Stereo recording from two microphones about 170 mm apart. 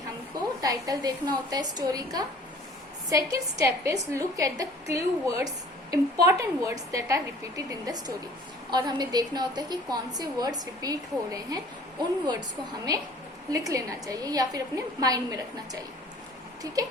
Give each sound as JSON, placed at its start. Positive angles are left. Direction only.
{"t": 0.6, "sound": "a woman's voice", "side_deg": -20}